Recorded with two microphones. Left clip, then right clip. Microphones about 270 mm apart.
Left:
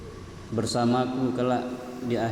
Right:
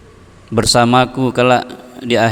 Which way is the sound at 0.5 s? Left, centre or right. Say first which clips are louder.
Right 14 dB; right.